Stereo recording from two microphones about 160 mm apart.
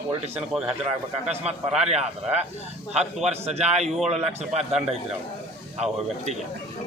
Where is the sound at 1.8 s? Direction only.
40° right (ahead or behind).